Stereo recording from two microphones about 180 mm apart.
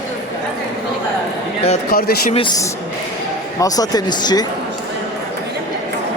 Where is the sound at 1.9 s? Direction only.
55° left (ahead or behind).